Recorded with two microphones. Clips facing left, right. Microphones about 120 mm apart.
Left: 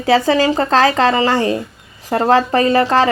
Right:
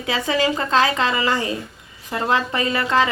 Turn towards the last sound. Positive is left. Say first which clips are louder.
# left 7 dB
turn(degrees=35)  # may be behind; listen again after turning